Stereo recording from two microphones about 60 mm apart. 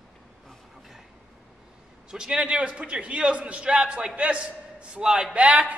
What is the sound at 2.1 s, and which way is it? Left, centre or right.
A man's voice, centre.